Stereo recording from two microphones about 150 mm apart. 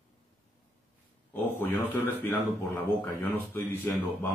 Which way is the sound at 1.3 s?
15° left (ahead or behind).